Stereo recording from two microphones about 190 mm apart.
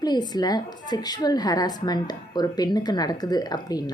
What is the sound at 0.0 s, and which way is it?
A woman's voice, 20° left (ahead or behind).